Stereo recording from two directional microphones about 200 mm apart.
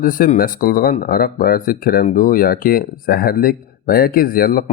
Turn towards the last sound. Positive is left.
turn(degrees=45)  # may be behind; listen again after turning